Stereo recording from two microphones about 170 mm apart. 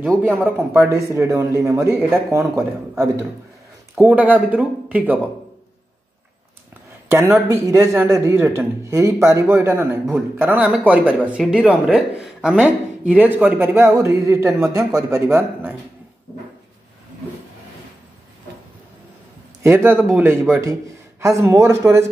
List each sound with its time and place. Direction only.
0.6 s a man's voice: 15° right (ahead or behind)
7.1 s a man's voice: 15° right (ahead or behind)
19.6 s a man's voice: 15° right (ahead or behind)